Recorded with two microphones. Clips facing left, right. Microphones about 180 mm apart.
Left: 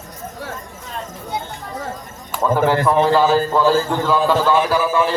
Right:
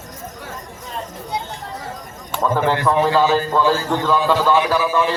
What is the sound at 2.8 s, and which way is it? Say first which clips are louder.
A man's voice: even; 10° left (ahead or behind).